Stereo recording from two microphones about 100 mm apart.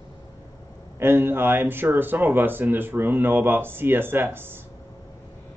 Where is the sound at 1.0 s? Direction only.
25° right (ahead or behind).